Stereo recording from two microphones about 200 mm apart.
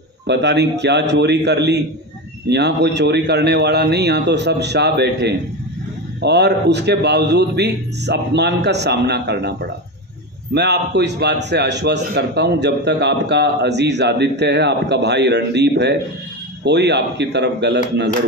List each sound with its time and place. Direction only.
0.3 s a man's voice: 60° right (ahead or behind)